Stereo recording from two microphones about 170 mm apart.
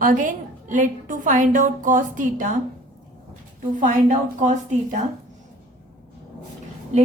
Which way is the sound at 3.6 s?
50° right (ahead or behind).